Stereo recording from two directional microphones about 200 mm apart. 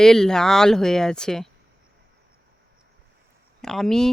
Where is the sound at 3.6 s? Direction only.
Centre (ahead or behind).